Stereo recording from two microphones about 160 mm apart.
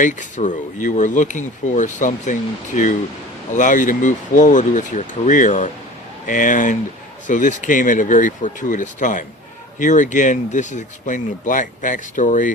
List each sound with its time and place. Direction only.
0.0 s speech: 50° left (ahead or behind)